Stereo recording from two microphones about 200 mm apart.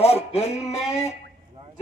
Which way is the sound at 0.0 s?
30° left (ahead or behind).